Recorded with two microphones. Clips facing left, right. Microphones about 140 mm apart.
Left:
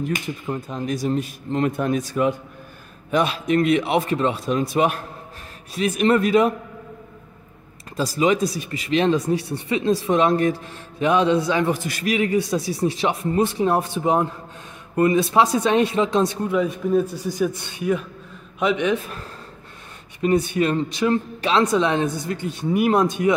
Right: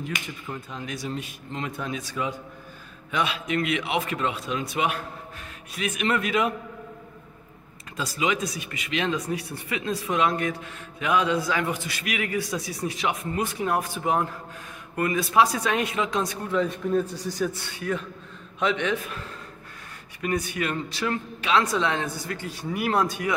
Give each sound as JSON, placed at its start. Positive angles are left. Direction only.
{"t": 0.0, "sound": "speech", "side_deg": 45}
{"t": 7.9, "sound": "speech", "side_deg": 40}
{"t": 11.7, "sound": "speech", "side_deg": 45}
{"t": 12.1, "sound": "speech", "side_deg": 25}
{"t": 16.4, "sound": "a man's voice", "side_deg": 10}
{"t": 20.2, "sound": "speech", "side_deg": 25}